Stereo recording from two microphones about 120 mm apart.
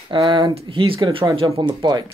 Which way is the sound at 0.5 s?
45° right (ahead or behind).